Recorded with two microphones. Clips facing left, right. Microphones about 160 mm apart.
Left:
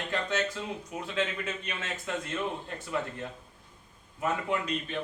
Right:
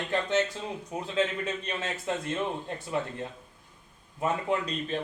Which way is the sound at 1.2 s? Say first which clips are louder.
Right 4 dB; 35° right (ahead or behind).